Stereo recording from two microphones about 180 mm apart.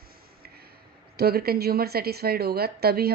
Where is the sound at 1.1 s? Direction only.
60° right (ahead or behind).